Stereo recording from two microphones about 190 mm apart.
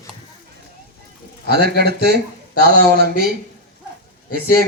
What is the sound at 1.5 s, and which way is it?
A man's voice, 55° right (ahead or behind).